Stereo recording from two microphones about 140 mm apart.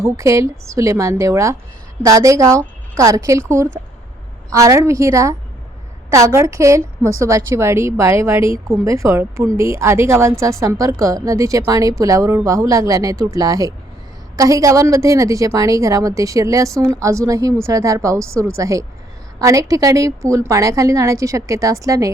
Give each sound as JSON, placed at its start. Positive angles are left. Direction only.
{"t": 0.0, "sound": "a woman's voice", "side_deg": -20}
{"t": 4.5, "sound": "a woman's voice", "side_deg": -20}